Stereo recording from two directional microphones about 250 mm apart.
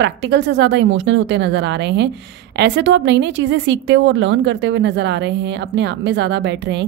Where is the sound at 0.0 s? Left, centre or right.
Right.